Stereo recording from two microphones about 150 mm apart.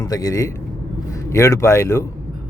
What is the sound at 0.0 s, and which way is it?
A man's voice, 25° left (ahead or behind).